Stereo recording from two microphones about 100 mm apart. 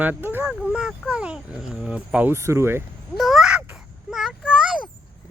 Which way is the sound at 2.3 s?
25° right (ahead or behind).